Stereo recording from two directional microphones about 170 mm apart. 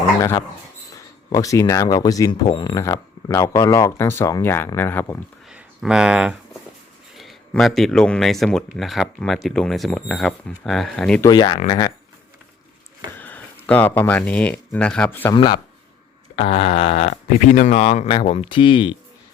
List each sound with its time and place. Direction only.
0.2 s speech: 20° left (ahead or behind)
5.5 s a sound: 5° right (ahead or behind)
7.2 s speech: centre (ahead or behind)
11.2 s speech: 25° left (ahead or behind)
13.1 s speech: 10° left (ahead or behind)
16.3 s speech: 35° left (ahead or behind)